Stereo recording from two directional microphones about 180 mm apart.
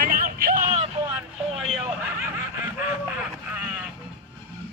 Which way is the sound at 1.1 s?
Centre (ahead or behind).